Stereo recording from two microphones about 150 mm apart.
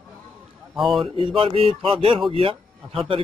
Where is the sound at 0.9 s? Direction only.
35° right (ahead or behind).